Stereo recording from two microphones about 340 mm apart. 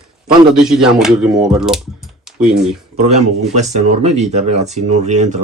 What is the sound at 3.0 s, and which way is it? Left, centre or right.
Speech, centre.